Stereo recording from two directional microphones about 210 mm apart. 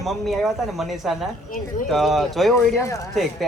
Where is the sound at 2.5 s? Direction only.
15° left (ahead or behind).